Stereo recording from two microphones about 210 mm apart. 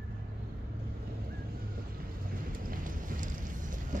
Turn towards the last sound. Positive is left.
turn(degrees=-40)  # may be behind; listen again after turning